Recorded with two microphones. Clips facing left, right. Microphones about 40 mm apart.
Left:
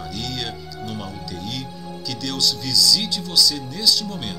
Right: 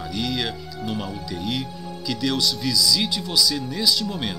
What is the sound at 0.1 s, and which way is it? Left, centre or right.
Speech, centre.